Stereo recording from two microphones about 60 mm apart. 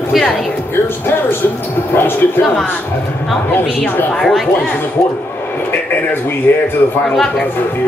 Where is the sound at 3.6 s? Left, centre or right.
Left.